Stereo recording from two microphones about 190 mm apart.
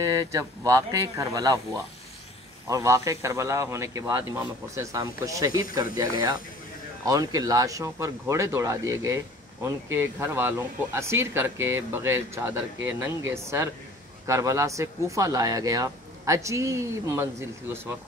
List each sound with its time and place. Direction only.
0.0 s speech: 20° right (ahead or behind)